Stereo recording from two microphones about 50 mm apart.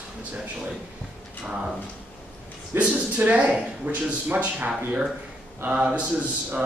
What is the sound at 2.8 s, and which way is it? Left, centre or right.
A man's voice, right.